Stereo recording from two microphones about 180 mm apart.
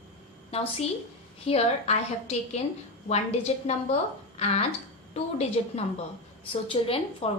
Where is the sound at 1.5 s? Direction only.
35° left (ahead or behind).